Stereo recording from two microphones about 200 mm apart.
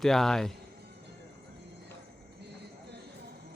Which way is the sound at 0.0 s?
Centre (ahead or behind).